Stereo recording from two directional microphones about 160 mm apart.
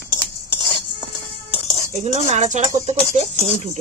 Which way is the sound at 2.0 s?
45° right (ahead or behind).